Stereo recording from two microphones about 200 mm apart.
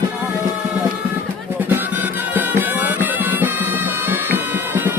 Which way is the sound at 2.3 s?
10° right (ahead or behind).